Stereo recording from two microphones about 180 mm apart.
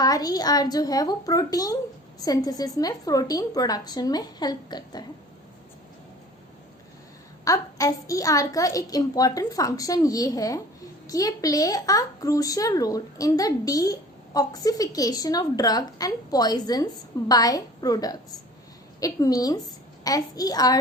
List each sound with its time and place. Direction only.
0.0 s a woman's voice: 20° left (ahead or behind)
7.4 s a woman's voice: 20° left (ahead or behind)